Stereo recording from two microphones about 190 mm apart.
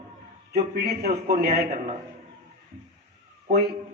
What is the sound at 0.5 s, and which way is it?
Speech, 55° right (ahead or behind).